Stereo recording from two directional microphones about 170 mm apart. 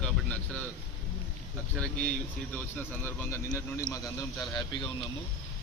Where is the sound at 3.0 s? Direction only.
15° left (ahead or behind).